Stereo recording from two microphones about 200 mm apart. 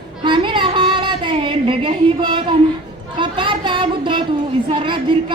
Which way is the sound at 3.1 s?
25° right (ahead or behind).